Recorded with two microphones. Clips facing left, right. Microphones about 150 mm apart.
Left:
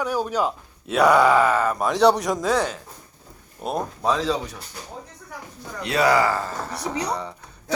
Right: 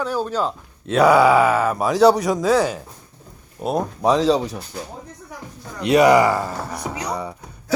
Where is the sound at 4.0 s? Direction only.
30° right (ahead or behind).